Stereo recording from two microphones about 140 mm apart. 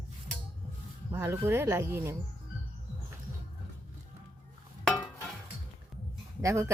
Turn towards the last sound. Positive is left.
turn(degrees=-20)  # may be behind; listen again after turning